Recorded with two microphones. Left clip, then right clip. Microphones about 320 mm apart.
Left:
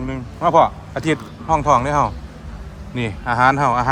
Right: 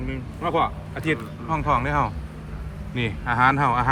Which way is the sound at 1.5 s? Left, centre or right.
Centre.